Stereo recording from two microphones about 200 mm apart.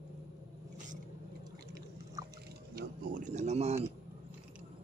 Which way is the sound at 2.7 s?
40° right (ahead or behind).